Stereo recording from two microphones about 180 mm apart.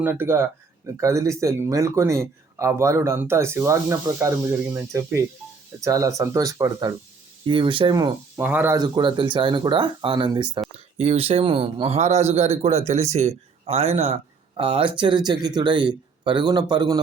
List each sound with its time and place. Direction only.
0.0 s speech: 10° right (ahead or behind)
8.8 s speech: 25° right (ahead or behind)
10.9 s a man's voice: 35° right (ahead or behind)